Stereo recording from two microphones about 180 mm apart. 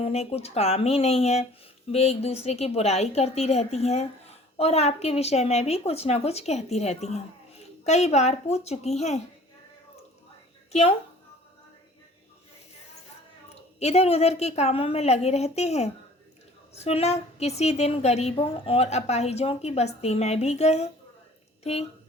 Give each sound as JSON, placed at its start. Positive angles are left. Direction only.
{"t": 0.0, "sound": "a woman's voice", "side_deg": 35}
{"t": 10.7, "sound": "speech", "side_deg": 35}
{"t": 13.7, "sound": "a woman's voice", "side_deg": 35}